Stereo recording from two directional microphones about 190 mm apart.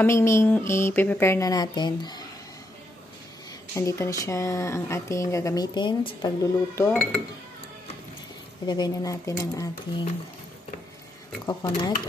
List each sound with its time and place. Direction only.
0.0 s speech: 15° left (ahead or behind)
3.7 s speech: 15° left (ahead or behind)
8.6 s speech: 20° left (ahead or behind)
11.4 s speech: 20° left (ahead or behind)